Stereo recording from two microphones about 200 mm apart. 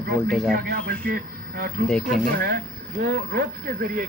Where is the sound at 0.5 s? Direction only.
50° right (ahead or behind).